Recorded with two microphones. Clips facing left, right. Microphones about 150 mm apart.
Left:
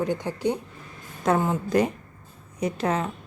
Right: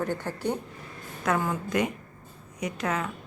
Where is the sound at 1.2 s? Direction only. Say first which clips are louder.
Left 4 dB; 25° left (ahead or behind).